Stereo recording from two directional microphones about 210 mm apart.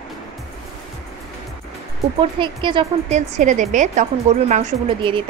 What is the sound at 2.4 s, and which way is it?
Speech, 25° right (ahead or behind).